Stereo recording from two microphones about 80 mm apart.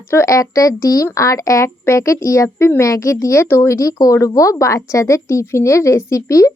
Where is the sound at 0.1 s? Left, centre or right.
Left.